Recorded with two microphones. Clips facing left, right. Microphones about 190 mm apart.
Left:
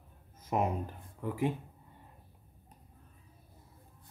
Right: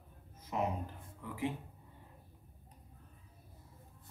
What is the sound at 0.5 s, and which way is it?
Speech, 55° left (ahead or behind).